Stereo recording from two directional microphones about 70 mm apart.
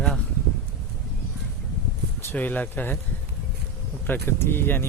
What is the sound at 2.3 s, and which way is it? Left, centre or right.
Speech, left.